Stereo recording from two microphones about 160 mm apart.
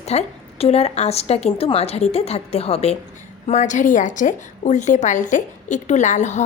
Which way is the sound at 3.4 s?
50° left (ahead or behind).